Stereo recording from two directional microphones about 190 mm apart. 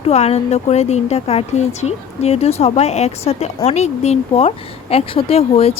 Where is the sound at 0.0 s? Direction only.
35° left (ahead or behind).